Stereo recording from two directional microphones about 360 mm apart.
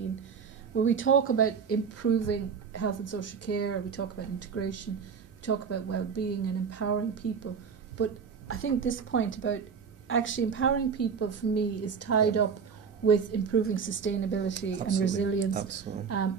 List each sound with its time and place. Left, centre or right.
0.7 s speech: left
15.9 s a woman's voice: right